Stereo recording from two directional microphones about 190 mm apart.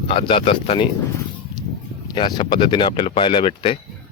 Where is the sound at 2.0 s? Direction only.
25° left (ahead or behind).